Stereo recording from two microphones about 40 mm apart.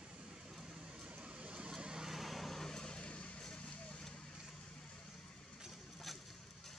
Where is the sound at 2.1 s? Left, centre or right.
Centre.